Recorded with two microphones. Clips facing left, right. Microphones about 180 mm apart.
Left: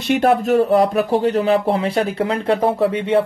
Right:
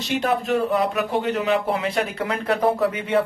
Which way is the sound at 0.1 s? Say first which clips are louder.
Left 7 dB; 50° left (ahead or behind).